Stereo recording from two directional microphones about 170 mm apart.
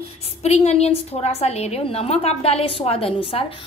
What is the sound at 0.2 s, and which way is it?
A woman's voice, 40° left (ahead or behind).